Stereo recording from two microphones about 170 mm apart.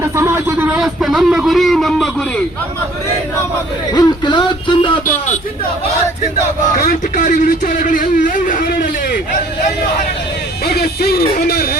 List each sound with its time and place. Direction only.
0.2 s speech: 15° right (ahead or behind); by 2.0 s centre (ahead or behind)
3.9 s speech: 25° left (ahead or behind)
6.7 s speech: 50° left (ahead or behind)
10.7 s speech: 65° left (ahead or behind)